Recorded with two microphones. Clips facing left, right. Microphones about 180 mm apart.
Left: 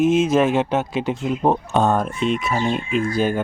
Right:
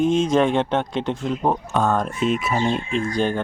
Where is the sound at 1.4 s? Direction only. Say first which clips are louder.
Left 3 dB; 20° left (ahead or behind).